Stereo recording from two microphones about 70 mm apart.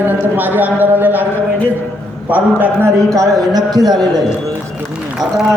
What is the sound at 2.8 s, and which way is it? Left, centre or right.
Speech, right.